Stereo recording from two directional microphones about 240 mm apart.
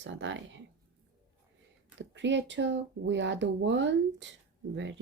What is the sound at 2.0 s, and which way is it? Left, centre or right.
Speech, right.